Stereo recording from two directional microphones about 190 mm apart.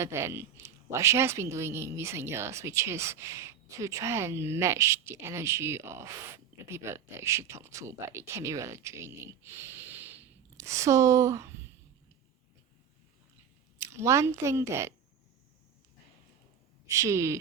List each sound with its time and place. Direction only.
0.0 s a woman's voice: 15° right (ahead or behind)
13.7 s speech: 15° right (ahead or behind)
16.9 s a woman's voice: 15° right (ahead or behind)